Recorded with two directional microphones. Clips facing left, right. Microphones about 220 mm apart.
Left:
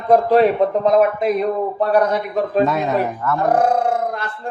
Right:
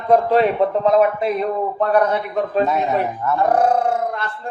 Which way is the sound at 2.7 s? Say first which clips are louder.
Left 1 dB; 90° left.